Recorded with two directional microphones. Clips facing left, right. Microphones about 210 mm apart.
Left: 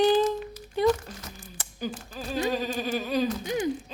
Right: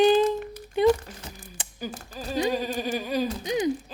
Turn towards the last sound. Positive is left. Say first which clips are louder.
# even
turn(degrees=-10)  # may be behind; listen again after turning